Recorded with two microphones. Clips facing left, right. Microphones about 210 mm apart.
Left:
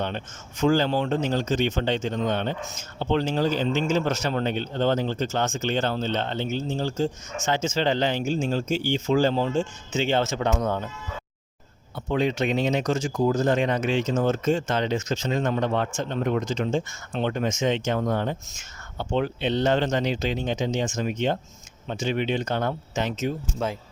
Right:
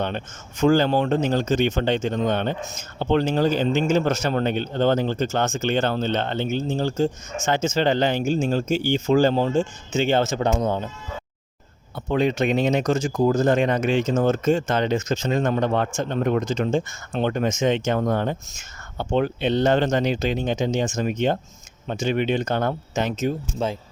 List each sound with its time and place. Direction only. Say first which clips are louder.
0.0 s speech: right 3 dB; 55° right (ahead or behind); by 10.9 s 25° right (ahead or behind)
11.9 s speech: right 3 dB; 50° right (ahead or behind)
23.6 s speech: right 3 dB; 30° right (ahead or behind)